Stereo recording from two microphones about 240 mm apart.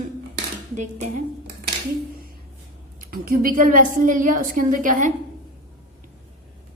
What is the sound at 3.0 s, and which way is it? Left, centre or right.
A woman's voice, right.